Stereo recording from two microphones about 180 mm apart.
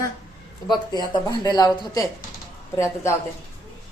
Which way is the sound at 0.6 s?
25° left (ahead or behind).